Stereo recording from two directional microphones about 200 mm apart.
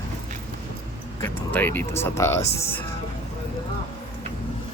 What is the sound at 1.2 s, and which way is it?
Speech, 10° left (ahead or behind).